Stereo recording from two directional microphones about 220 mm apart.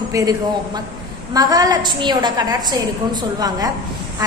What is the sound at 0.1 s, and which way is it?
A woman's voice, 15° right (ahead or behind).